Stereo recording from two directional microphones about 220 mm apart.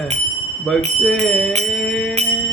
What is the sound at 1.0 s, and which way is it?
Bell, centre (ahead or behind).